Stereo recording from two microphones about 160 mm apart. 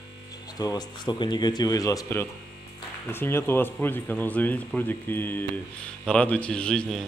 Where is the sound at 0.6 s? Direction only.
25° left (ahead or behind); by 7.1 s 5° left (ahead or behind).